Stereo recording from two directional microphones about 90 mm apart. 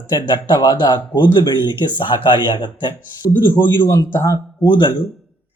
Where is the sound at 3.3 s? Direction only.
25° left (ahead or behind).